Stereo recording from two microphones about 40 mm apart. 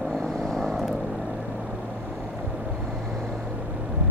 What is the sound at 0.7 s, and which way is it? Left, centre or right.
Vehicle, centre.